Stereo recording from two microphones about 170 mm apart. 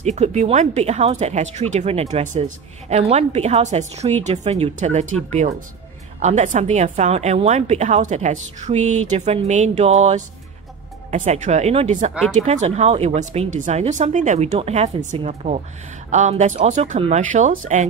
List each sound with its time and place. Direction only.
0.0 s speech: 40° right (ahead or behind)
6.1 s a woman's voice: 45° right (ahead or behind)